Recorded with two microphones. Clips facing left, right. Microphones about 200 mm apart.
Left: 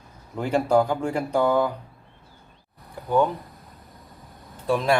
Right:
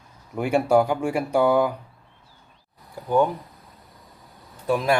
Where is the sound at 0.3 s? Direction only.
10° right (ahead or behind).